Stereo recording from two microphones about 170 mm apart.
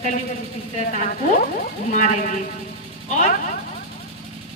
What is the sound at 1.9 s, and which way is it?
Speech, 45° left (ahead or behind).